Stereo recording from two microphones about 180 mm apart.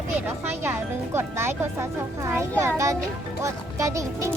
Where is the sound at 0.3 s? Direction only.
10° right (ahead or behind).